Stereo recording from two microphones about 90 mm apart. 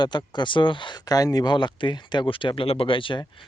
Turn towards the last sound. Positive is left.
turn(degrees=70)  # may be behind; listen again after turning